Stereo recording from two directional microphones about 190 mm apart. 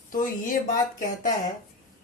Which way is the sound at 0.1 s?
45° left (ahead or behind).